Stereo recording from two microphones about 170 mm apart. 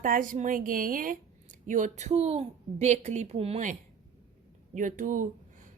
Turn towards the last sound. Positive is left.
turn(degrees=-50)  # may be behind; listen again after turning